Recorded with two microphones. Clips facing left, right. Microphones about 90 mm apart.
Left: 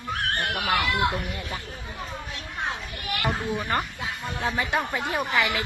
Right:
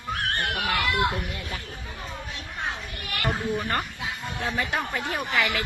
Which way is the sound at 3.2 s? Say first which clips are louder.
Right 1 dB; 5° left (ahead or behind).